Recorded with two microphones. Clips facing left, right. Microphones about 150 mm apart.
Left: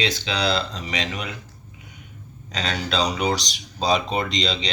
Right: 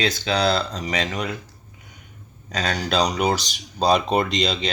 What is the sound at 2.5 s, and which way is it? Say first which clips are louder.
Speech: right 3 dB; 45° right (ahead or behind).